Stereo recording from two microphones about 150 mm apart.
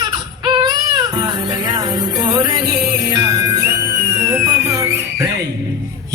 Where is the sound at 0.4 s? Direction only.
30° right (ahead or behind).